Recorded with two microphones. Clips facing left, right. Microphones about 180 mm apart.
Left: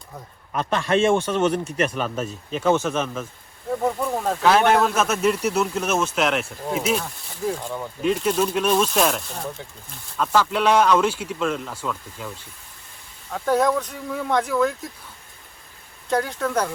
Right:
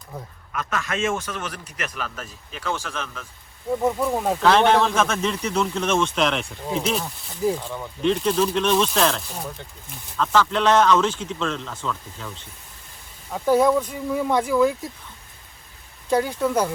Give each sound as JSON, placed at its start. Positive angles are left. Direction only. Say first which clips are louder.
{"t": 0.5, "sound": "a man's voice", "louder": "left 7 dB", "side_deg": 30}
{"t": 3.7, "sound": "speech", "louder": "right 1 dB", "side_deg": 0}
{"t": 10.2, "sound": "speech", "louder": "even", "side_deg": 10}
{"t": 13.3, "sound": "speech", "louder": "right 2 dB", "side_deg": -5}
{"t": 16.0, "sound": "speech", "louder": "right 2 dB", "side_deg": -5}